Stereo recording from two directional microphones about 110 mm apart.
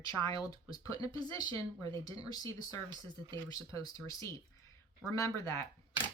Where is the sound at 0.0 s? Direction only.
35° left (ahead or behind).